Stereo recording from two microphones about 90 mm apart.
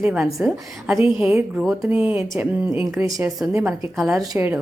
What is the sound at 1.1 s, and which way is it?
A woman's voice, 15° right (ahead or behind).